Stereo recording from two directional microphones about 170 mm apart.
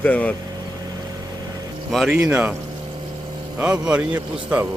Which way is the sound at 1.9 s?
Centre (ahead or behind).